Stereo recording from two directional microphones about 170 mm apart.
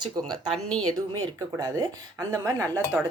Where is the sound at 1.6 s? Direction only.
20° right (ahead or behind).